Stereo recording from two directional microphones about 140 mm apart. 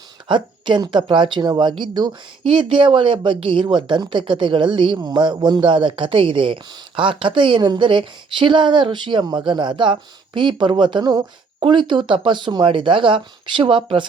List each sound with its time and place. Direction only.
0.3 s speech: 35° right (ahead or behind)